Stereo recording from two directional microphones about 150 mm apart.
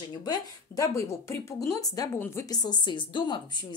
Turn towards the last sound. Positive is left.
turn(degrees=30)  # may be behind; listen again after turning